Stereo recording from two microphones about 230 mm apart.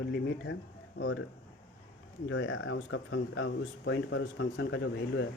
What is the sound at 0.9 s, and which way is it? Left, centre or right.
Speech, left.